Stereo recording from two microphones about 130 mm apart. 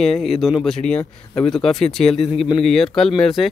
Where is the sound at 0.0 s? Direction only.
Centre (ahead or behind).